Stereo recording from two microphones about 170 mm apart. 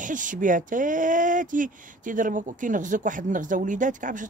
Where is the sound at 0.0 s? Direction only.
50° right (ahead or behind).